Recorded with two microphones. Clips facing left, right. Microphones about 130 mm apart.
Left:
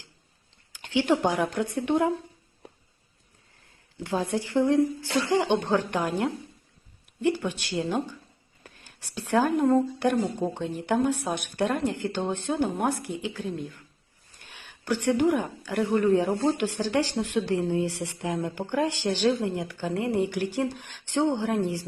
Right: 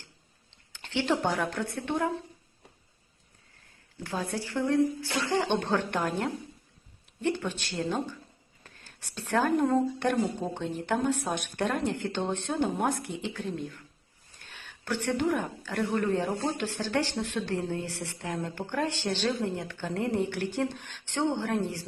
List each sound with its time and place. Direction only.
0.7 s speech: 10° left (ahead or behind)
3.9 s speech: 15° left (ahead or behind)
8.6 s a sound: 10° left (ahead or behind)
9.5 s speech: centre (ahead or behind)
10.7 s speech: centre (ahead or behind)
14.4 s speech: 15° left (ahead or behind)